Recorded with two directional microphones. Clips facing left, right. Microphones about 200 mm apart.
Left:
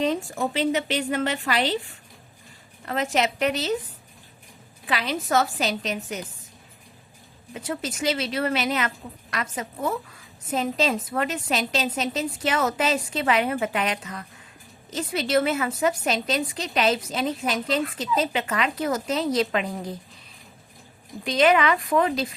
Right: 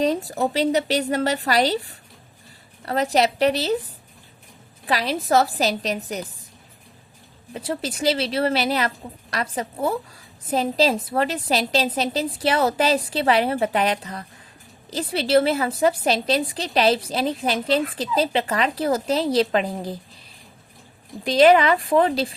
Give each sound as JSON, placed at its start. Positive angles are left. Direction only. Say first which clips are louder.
{"t": 0.0, "sound": "a woman's voice", "louder": "right 3 dB", "side_deg": -35}
{"t": 4.9, "sound": "a woman's voice", "louder": "right 4 dB", "side_deg": -35}
{"t": 7.5, "sound": "a woman's voice", "louder": "right 3 dB", "side_deg": -35}
{"t": 21.2, "sound": "a woman's voice", "louder": "right 5 dB", "side_deg": -35}